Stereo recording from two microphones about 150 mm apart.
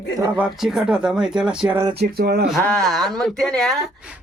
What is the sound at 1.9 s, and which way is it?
Speech, 90° right.